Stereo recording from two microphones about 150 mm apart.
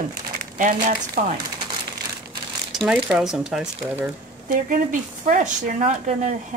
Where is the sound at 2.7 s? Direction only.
Centre (ahead or behind).